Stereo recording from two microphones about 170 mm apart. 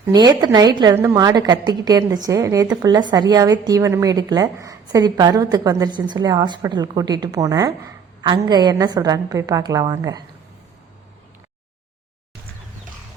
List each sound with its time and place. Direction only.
0.0 s a woman's voice: 25° right (ahead or behind)